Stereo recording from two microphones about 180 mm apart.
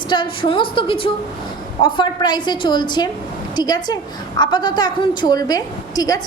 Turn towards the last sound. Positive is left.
turn(degrees=20)  # may be behind; listen again after turning